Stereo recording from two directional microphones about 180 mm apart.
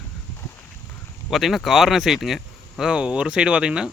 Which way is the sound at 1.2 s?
Centre (ahead or behind).